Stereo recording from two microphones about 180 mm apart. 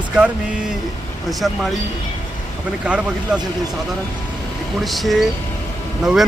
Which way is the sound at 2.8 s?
5° right (ahead or behind).